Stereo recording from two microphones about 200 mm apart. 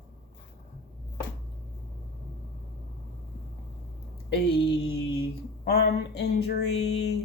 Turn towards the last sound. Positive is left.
turn(degrees=55)  # may be behind; listen again after turning